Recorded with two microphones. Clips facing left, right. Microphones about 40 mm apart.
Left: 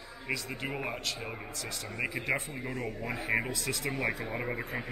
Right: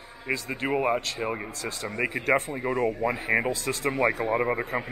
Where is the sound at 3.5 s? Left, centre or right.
Right.